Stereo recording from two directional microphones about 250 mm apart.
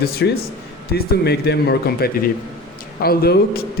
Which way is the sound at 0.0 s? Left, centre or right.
Left.